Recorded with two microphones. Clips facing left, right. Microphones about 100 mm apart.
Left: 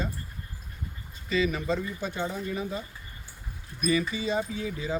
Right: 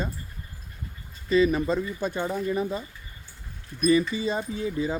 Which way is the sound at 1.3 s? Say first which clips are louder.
Right 5 dB; 40° right (ahead or behind).